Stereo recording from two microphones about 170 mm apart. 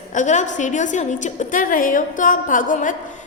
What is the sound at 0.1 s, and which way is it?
A woman's voice, 45° left (ahead or behind).